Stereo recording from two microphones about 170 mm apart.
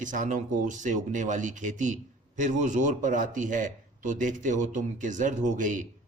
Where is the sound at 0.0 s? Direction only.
50° right (ahead or behind).